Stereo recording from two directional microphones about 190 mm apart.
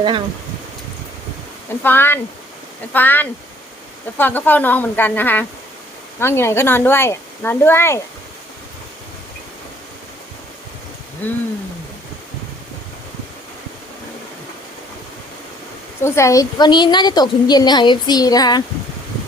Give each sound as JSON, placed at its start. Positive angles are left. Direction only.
{"t": 1.8, "sound": "speech", "side_deg": 10}
{"t": 11.2, "sound": "speech", "side_deg": 10}
{"t": 16.0, "sound": "a woman's voice", "side_deg": 15}